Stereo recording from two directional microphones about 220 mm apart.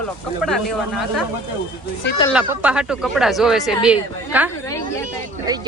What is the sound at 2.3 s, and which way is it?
A woman's voice, 5° right (ahead or behind).